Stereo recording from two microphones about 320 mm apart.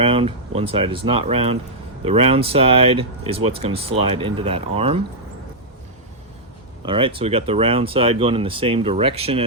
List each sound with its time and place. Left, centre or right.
0.0 s speech: centre
6.8 s speech: centre